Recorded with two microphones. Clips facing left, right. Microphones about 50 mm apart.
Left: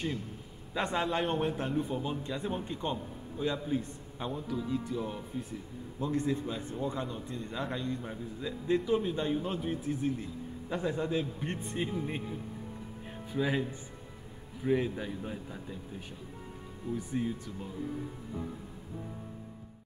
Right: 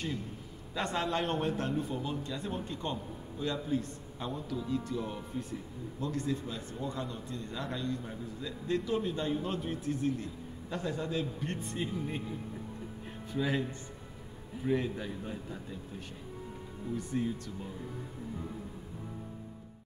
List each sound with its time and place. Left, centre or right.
0.7 s a man's voice: centre
5.9 s a man's voice: centre
16.9 s a man's voice: centre